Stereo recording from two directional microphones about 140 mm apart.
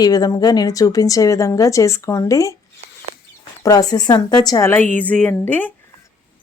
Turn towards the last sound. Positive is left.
turn(degrees=15)  # may be behind; listen again after turning